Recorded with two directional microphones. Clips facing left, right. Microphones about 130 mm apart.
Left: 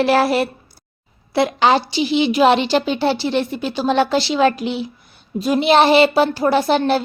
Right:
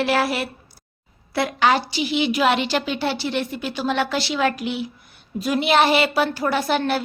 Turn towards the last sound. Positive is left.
turn(degrees=25)  # may be behind; listen again after turning